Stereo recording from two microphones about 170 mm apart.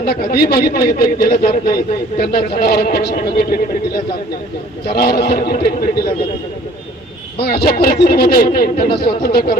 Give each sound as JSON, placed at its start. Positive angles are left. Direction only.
{"t": 0.0, "sound": "a man's voice", "side_deg": 65}
{"t": 7.3, "sound": "speech", "side_deg": 65}